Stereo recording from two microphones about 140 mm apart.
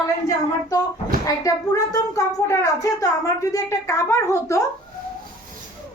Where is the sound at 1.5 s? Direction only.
25° left (ahead or behind).